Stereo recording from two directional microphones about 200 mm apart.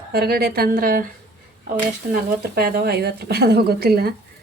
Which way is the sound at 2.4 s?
50° right (ahead or behind).